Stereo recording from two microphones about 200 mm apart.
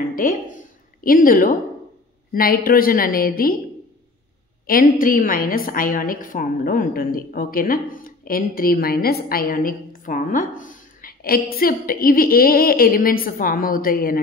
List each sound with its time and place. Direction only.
0.1 s a woman's voice: 45° left (ahead or behind)
4.6 s a woman's voice: 45° left (ahead or behind)